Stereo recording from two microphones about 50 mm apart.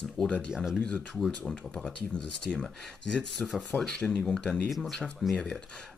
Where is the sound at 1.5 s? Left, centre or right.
Centre.